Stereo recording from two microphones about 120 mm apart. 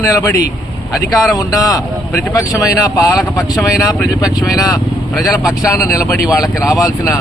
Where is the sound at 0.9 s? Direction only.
Centre (ahead or behind).